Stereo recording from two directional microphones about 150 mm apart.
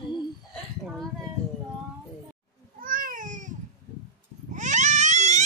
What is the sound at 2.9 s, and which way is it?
Cat, 65° right (ahead or behind).